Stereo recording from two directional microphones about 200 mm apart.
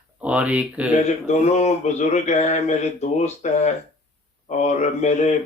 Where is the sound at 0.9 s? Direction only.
35° left (ahead or behind).